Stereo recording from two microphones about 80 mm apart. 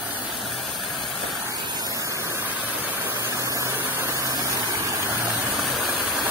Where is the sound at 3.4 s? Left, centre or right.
Right.